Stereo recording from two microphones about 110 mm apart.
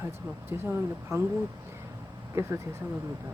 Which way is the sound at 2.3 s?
25° right (ahead or behind).